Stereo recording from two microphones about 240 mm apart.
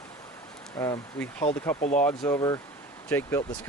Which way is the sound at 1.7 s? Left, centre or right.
Left.